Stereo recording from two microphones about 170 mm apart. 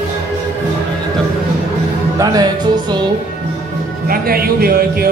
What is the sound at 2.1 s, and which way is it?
Music, 25° right (ahead or behind).